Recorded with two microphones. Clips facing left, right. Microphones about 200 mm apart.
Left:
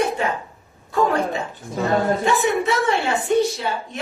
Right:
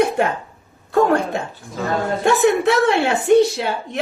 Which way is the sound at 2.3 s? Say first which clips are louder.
Right 4 dB; 70° right (ahead or behind).